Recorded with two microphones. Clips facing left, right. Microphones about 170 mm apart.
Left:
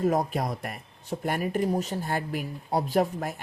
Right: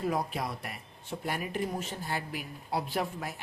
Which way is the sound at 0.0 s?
45° left (ahead or behind).